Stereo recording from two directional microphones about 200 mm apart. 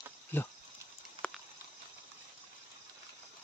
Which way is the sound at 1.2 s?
30° right (ahead or behind).